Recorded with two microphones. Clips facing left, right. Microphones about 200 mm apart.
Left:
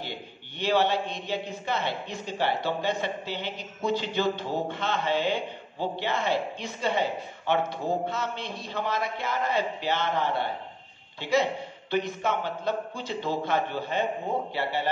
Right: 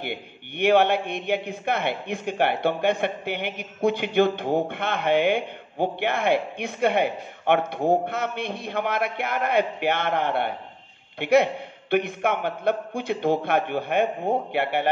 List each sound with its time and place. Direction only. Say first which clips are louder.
0.0 s a man's voice: right 5 dB; 60° right (ahead or behind)